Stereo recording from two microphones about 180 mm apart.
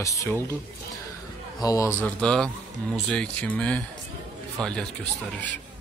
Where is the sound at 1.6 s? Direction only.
20° left (ahead or behind).